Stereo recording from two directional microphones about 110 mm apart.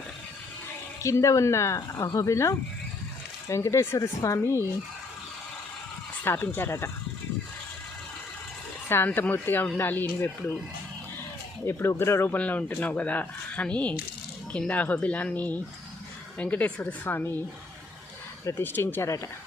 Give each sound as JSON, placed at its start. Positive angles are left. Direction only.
{"t": 1.0, "sound": "speech", "side_deg": 30}
{"t": 6.2, "sound": "speech", "side_deg": 20}
{"t": 8.9, "sound": "speech", "side_deg": 20}
{"t": 11.6, "sound": "speech", "side_deg": 25}
{"t": 18.4, "sound": "speech", "side_deg": 20}